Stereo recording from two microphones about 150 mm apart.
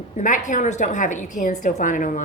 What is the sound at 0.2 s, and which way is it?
A woman's voice, 55° left (ahead or behind).